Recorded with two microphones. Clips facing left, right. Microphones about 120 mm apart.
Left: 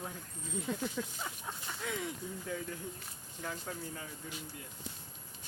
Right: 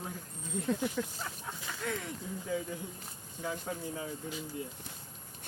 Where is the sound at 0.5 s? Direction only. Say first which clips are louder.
Right 4 dB; centre (ahead or behind).